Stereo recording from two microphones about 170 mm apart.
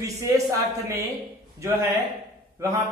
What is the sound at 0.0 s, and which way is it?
A man's voice, 20° right (ahead or behind).